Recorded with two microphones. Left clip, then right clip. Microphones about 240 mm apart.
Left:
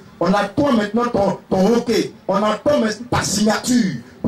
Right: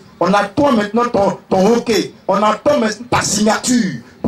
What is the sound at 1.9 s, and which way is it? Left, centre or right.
Speech, centre.